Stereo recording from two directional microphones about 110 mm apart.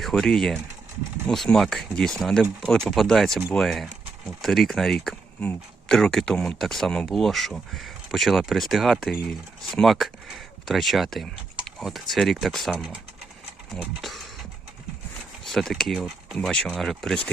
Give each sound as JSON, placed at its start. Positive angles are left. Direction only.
{"t": 0.0, "sound": "speech", "side_deg": 5}
{"t": 12.7, "sound": "speech", "side_deg": -10}
{"t": 15.4, "sound": "speech", "side_deg": 5}